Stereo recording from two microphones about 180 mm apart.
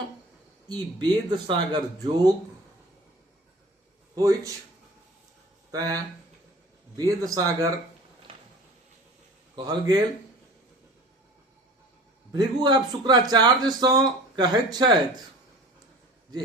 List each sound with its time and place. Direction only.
0.7 s a man's voice: 25° right (ahead or behind)
4.1 s a man's voice: 20° right (ahead or behind)
5.7 s a man's voice: 20° right (ahead or behind)
8.3 s a sound: 30° right (ahead or behind)
9.6 s a man's voice: 20° right (ahead or behind)
12.3 s a man's voice: 25° right (ahead or behind)